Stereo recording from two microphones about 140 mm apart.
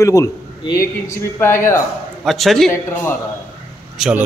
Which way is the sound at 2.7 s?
15° left (ahead or behind).